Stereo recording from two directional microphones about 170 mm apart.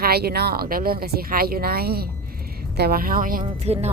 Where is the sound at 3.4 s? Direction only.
40° right (ahead or behind).